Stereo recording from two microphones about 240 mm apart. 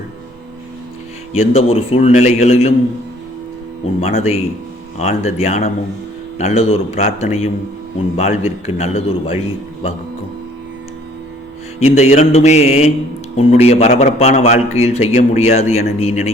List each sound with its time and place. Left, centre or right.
1.3 s a man's voice: left
4.0 s a man's voice: left
11.8 s a man's voice: left